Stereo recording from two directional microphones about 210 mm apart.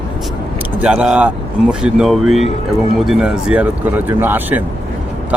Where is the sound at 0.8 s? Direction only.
5° right (ahead or behind).